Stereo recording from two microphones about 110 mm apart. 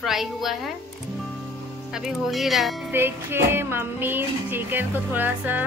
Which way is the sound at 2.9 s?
20° right (ahead or behind).